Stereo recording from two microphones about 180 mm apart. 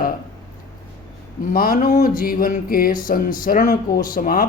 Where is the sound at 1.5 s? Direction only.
55° left (ahead or behind).